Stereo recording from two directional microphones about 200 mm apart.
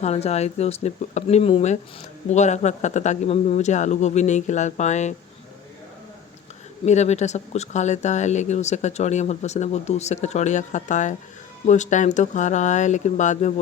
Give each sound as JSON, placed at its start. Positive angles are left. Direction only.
{"t": 0.0, "sound": "speech", "side_deg": 35}
{"t": 6.8, "sound": "speech", "side_deg": 35}